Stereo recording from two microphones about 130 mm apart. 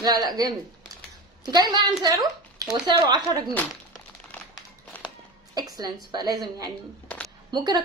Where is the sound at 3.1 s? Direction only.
30° right (ahead or behind).